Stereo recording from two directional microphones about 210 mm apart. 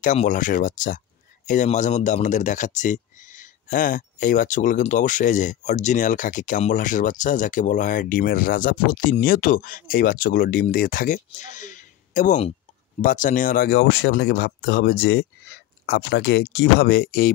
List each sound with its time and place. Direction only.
0.0 s speech: 35° left (ahead or behind)